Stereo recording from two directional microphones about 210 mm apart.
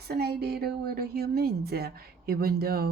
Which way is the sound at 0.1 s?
50° right (ahead or behind).